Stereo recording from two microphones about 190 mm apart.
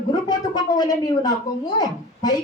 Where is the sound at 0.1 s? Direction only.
20° left (ahead or behind).